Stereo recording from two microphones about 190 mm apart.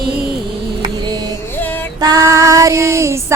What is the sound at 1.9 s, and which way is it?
Female singing, 20° right (ahead or behind).